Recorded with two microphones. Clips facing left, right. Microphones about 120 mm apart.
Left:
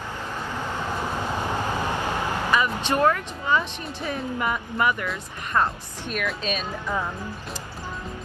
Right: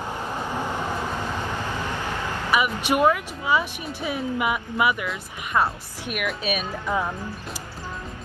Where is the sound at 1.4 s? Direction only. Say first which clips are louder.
Left 3 dB; 15° left (ahead or behind).